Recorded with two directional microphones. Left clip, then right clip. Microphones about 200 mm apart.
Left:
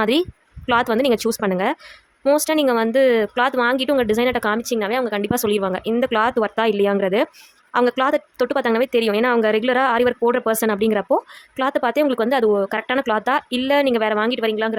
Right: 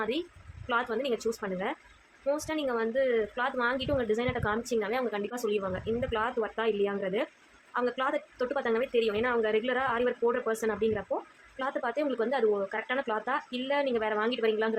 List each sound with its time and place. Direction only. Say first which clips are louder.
0.0 s speech: left 14 dB; 55° left (ahead or behind)